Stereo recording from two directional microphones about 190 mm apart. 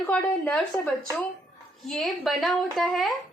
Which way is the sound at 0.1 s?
5° left (ahead or behind).